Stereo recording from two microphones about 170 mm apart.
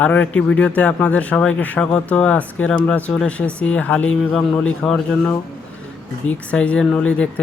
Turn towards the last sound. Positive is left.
turn(degrees=5)  # may be behind; listen again after turning